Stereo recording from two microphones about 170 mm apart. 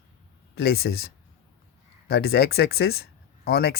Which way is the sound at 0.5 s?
70° left (ahead or behind).